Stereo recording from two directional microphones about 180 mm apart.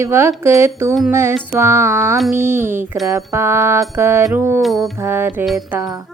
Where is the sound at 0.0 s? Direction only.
15° right (ahead or behind).